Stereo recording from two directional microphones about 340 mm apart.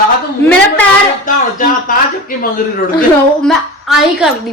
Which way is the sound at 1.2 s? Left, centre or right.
Left.